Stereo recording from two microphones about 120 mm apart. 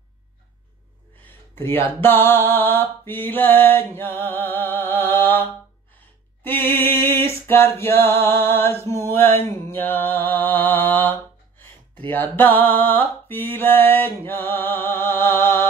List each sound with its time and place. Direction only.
1.2 s mantra: 20° left (ahead or behind)
6.4 s music: 15° left (ahead or behind)
7.2 s a sound: 20° left (ahead or behind)
9.5 s mantra: 20° left (ahead or behind)